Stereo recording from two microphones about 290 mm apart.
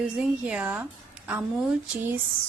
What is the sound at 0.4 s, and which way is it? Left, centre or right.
Speech, centre.